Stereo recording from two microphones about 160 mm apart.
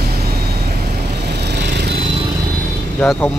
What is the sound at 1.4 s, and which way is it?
Vehicle, 90° right.